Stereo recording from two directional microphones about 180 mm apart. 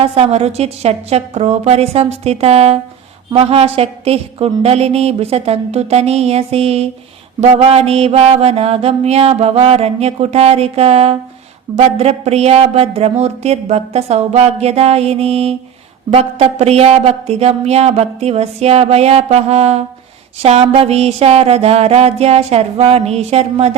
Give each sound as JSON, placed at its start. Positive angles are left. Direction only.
{"t": 0.0, "sound": "a woman's voice", "side_deg": -35}